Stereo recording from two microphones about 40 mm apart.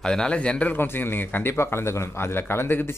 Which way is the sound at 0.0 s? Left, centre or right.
Centre.